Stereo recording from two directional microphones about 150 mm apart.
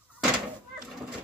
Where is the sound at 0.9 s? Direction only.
5° right (ahead or behind).